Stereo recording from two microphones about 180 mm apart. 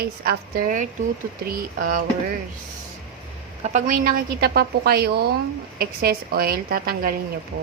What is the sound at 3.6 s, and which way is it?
A woman's voice, 40° right (ahead or behind).